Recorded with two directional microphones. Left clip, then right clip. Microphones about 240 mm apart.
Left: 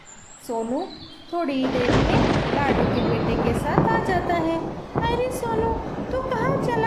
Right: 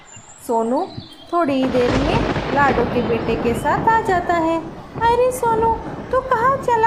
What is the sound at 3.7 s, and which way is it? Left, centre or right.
Child singing, centre.